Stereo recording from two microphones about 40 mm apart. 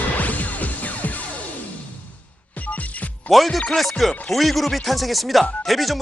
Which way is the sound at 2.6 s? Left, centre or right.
Left.